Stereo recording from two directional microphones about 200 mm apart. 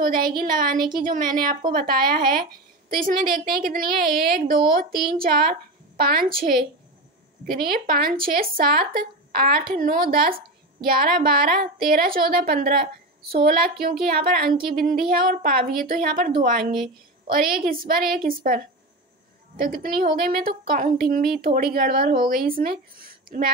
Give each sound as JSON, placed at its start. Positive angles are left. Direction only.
{"t": 0.0, "sound": "speech", "side_deg": -45}
{"t": 17.3, "sound": "speech", "side_deg": -45}